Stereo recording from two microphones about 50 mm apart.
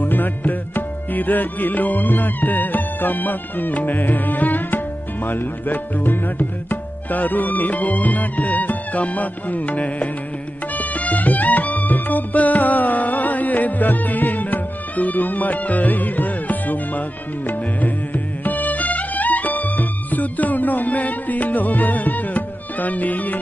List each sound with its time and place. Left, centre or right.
0.0 s music: left